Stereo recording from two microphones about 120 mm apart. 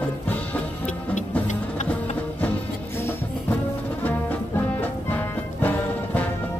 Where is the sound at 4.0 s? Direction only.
15° left (ahead or behind).